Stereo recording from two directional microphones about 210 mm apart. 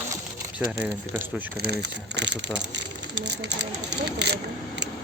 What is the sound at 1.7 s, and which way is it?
Speech, 55° right (ahead or behind).